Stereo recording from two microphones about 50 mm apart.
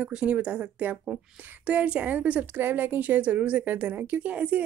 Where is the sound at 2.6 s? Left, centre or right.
Right.